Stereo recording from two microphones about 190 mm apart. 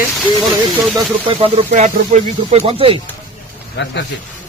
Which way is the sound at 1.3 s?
30° right (ahead or behind).